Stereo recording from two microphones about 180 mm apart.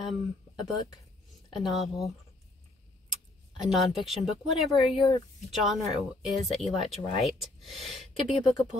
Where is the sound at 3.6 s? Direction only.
Centre (ahead or behind).